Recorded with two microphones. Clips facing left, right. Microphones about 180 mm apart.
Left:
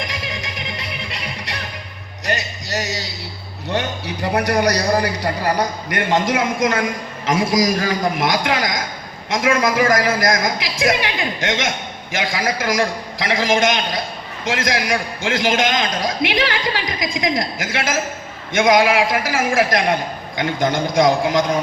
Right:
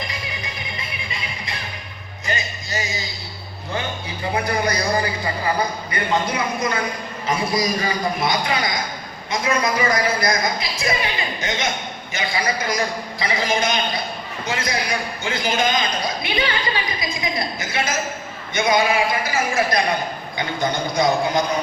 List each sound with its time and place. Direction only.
0.0 s music: 90° left; by 3.1 s 75° left (ahead or behind)
3.7 s a man's voice: 75° left (ahead or behind); by 21.4 s 90° left